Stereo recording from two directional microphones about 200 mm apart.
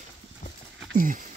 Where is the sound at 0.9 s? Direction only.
40° right (ahead or behind).